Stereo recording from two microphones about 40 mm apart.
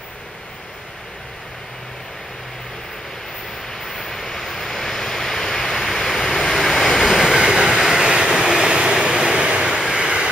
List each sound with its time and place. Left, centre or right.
3.7 s vehicle: centre
7.2 s train: centre
7.8 s vehicle: centre